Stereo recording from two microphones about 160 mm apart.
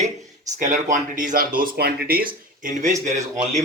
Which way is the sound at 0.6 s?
50° right (ahead or behind).